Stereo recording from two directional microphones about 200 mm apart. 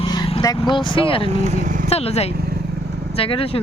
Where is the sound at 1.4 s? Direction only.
35° right (ahead or behind).